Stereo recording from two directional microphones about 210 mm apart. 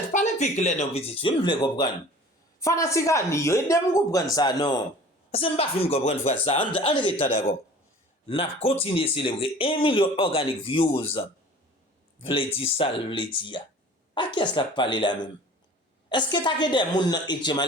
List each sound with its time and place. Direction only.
0.1 s speech: 35° left (ahead or behind)
8.3 s speech: 25° left (ahead or behind)
12.2 s speech: 25° left (ahead or behind)